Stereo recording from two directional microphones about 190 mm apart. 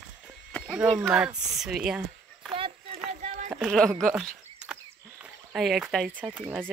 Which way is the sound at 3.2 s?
40° right (ahead or behind).